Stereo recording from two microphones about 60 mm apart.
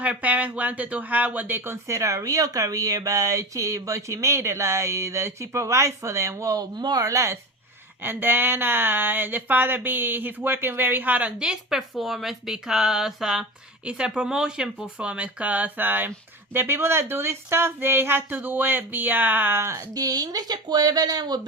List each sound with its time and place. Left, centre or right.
0.0 s speech: right
2.0 s speech: right
8.0 s speech: right
19.7 s speech: right